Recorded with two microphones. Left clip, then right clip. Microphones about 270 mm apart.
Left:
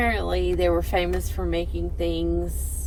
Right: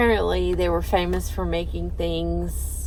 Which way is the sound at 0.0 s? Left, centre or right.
Centre.